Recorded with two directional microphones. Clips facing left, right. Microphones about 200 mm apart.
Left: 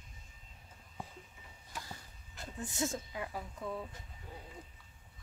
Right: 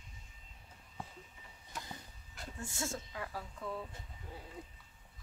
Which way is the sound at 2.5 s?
20° left (ahead or behind).